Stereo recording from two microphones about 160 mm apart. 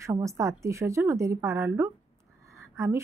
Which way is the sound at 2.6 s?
15° right (ahead or behind).